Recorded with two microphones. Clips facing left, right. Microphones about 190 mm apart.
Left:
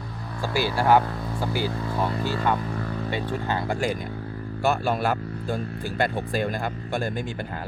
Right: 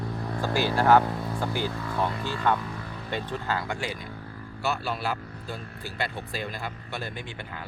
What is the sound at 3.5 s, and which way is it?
Speech, 35° left (ahead or behind).